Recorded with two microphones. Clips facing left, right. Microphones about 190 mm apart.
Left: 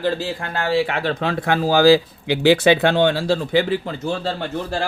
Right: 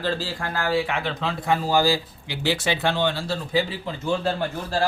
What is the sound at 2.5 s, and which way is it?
Speech, 60° left (ahead or behind).